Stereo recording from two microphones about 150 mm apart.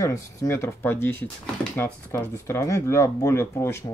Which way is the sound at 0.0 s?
20° left (ahead or behind).